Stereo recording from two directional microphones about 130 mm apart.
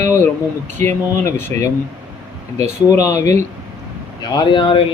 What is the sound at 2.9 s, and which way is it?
Speech, 25° left (ahead or behind).